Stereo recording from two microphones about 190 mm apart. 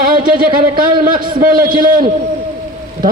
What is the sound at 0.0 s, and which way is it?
A man's voice, 50° right (ahead or behind).